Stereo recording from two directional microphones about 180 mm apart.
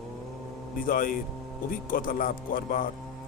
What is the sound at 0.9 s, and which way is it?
A man's voice, 50° left (ahead or behind).